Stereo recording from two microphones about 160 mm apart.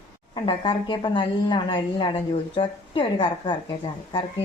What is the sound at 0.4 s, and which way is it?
A woman's voice, 30° left (ahead or behind).